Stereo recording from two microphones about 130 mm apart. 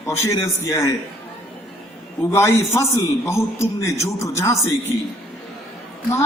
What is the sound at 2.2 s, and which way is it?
A man's voice, 20° left (ahead or behind).